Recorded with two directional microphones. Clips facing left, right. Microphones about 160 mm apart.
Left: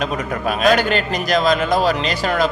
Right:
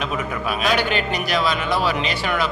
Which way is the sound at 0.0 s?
45° left (ahead or behind).